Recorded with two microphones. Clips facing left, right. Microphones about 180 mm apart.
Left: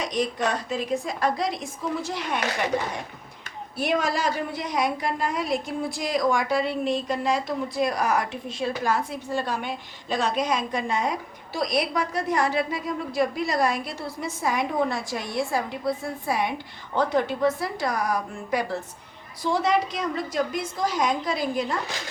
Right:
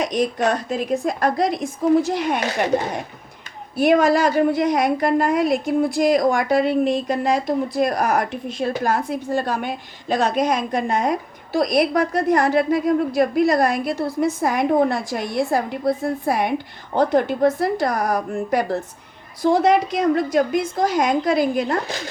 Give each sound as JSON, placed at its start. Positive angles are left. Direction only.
{"t": 0.2, "sound": "a woman's voice", "side_deg": -55}